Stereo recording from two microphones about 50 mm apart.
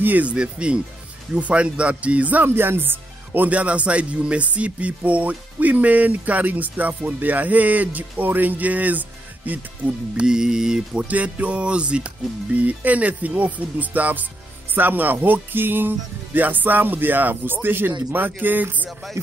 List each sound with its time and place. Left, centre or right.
0.0 s speech: right
0.4 s speech: right
2.4 s speech: right
3.4 s speech: right
10.1 s music: centre
11.1 s speech: right